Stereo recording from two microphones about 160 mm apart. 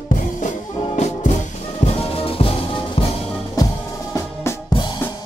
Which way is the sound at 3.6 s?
25° left (ahead or behind).